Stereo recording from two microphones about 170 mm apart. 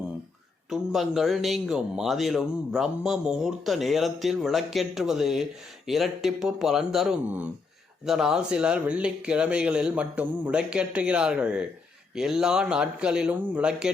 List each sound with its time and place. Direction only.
0.7 s speech: centre (ahead or behind)